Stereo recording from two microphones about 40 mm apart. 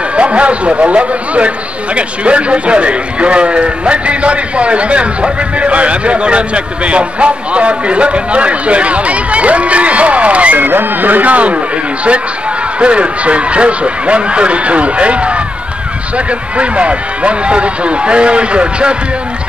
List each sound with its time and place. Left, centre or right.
0.1 s a man's voice: right
10.6 s a man's voice: right